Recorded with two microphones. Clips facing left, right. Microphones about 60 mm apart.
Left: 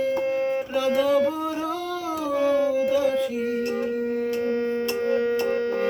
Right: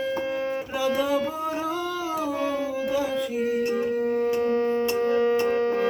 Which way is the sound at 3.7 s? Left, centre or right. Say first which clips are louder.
Right 1 dB; centre.